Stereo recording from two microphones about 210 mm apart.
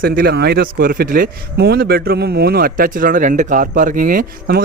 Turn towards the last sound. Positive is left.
turn(degrees=-45)  # may be behind; listen again after turning